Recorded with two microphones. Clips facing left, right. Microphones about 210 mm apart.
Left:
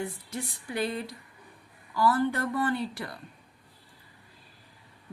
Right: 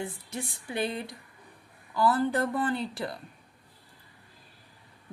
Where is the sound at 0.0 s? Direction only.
25° right (ahead or behind).